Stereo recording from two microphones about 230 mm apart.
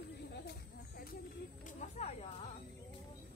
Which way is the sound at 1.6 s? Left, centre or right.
Left.